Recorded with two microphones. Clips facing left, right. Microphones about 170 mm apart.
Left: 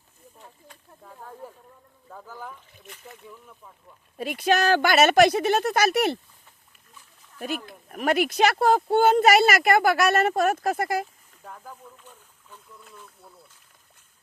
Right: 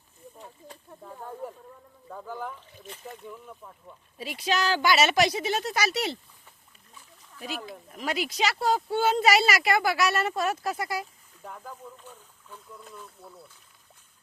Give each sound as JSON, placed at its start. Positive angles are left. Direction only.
{"t": 4.2, "sound": "speech", "side_deg": 55}
{"t": 7.3, "sound": "speech", "side_deg": 55}